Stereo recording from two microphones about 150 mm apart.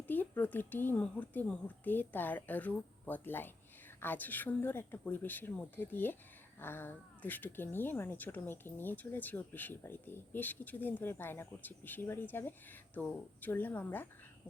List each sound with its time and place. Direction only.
0.1 s speech: 10° left (ahead or behind)